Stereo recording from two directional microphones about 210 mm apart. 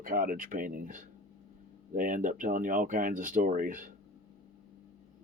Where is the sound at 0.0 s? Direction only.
40° right (ahead or behind).